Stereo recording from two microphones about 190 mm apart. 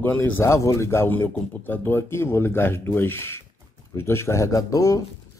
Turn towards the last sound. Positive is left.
turn(degrees=20)  # may be behind; listen again after turning